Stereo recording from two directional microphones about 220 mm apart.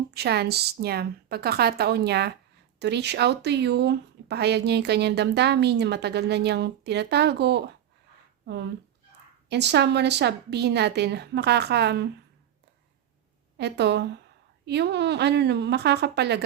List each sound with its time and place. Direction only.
0.1 s speech: 45° right (ahead or behind)
13.6 s speech: 50° right (ahead or behind)